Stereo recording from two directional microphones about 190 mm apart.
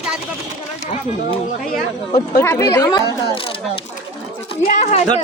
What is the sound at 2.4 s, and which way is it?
Speech, 15° left (ahead or behind).